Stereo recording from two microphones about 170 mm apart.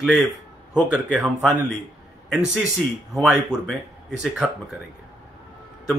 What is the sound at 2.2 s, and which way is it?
A man's voice, 5° right (ahead or behind).